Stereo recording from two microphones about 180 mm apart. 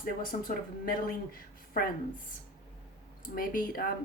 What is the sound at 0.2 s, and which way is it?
Speech, 50° left (ahead or behind).